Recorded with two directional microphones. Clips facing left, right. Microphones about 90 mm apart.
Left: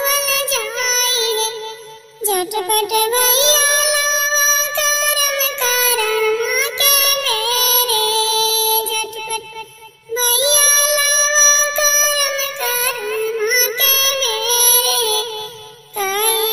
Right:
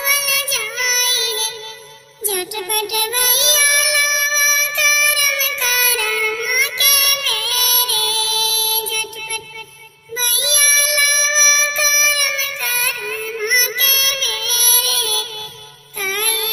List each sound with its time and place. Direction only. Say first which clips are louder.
0.0 s music: left 4 dB; 35° left (ahead or behind)